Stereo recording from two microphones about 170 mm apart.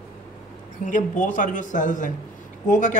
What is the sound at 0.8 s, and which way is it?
Speech, 50° left (ahead or behind).